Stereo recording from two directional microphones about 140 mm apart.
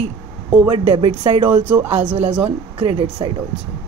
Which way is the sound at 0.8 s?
40° right (ahead or behind).